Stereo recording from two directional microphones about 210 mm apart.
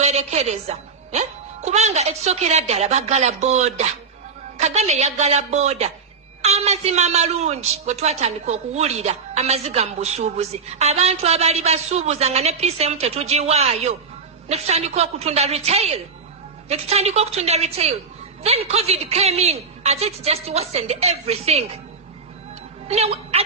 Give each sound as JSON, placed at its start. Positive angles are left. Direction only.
{"t": 0.0, "sound": "a woman's voice", "side_deg": -30}
{"t": 22.8, "sound": "a woman's voice", "side_deg": -30}